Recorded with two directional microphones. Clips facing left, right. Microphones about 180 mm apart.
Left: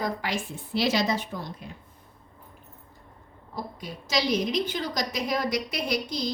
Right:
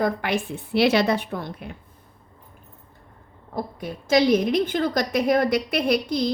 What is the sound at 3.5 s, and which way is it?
A woman's voice, 55° right (ahead or behind).